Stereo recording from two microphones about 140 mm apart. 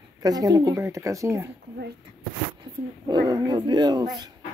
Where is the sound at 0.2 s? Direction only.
25° right (ahead or behind).